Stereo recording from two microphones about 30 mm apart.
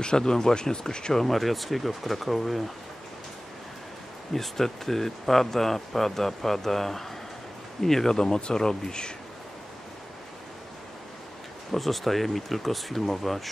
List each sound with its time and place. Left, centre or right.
0.0 s speech: left
1.1 s speech: centre
4.3 s speech: centre; by 9.1 s left
11.7 s speech: centre